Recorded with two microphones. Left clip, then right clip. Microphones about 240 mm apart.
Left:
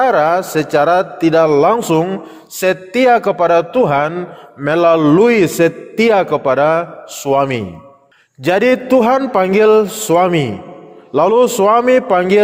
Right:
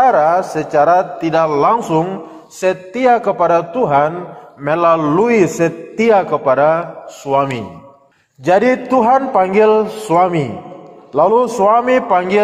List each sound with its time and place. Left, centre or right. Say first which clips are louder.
0.0 s a man's voice: right 1 dB; left
11.5 s a man's voice: left 1 dB; left